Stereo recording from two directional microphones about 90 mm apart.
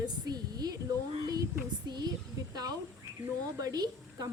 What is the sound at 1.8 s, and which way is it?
A woman's voice, 50° right (ahead or behind).